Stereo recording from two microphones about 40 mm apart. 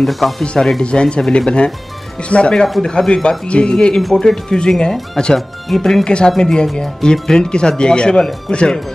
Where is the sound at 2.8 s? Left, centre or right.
Centre.